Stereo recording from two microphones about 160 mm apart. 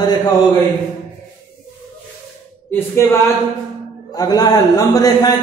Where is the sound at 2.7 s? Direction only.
15° left (ahead or behind).